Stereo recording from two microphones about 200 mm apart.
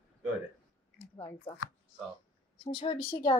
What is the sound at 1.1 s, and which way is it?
Speech, 25° left (ahead or behind).